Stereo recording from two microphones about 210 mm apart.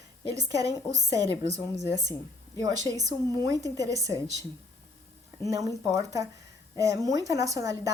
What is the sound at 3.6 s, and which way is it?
Speech, 15° right (ahead or behind).